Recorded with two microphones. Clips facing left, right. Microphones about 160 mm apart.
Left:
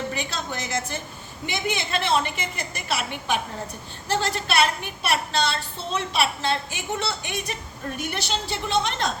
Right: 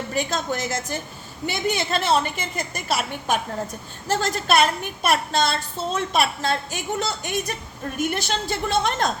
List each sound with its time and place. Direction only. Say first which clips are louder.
0.1 s a woman's voice: right 5 dB; 45° right (ahead or behind)